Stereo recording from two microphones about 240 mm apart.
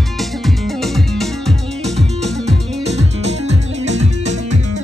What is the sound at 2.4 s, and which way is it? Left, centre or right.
Music, right.